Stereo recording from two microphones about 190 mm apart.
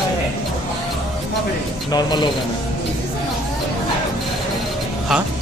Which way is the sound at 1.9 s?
20° left (ahead or behind).